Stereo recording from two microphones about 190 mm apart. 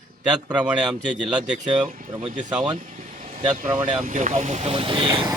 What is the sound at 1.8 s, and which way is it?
Speech, 40° right (ahead or behind).